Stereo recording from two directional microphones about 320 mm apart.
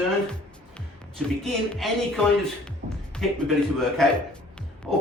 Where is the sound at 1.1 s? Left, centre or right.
Centre.